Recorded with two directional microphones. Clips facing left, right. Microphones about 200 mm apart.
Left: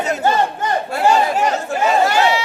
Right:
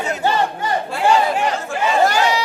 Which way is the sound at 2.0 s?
40° right (ahead or behind).